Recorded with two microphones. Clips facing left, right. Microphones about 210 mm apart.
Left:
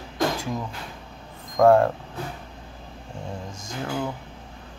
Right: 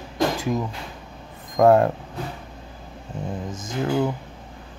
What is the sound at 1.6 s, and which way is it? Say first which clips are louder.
Speech: right 1 dB; 20° right (ahead or behind).